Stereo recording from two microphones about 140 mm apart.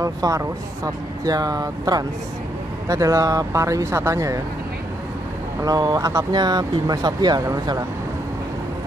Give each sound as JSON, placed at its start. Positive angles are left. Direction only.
{"t": 0.0, "sound": "speech", "side_deg": -25}
{"t": 5.6, "sound": "speech", "side_deg": -30}